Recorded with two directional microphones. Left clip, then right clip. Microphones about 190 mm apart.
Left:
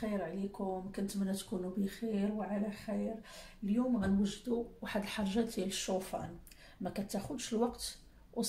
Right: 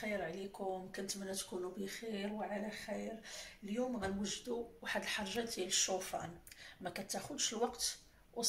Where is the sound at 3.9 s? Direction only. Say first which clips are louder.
Left 5 dB; 50° left (ahead or behind).